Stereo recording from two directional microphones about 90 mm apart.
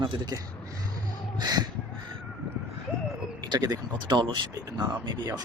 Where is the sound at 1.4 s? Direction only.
45° right (ahead or behind).